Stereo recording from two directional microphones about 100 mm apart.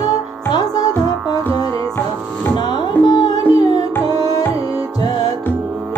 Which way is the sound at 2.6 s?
45° left (ahead or behind).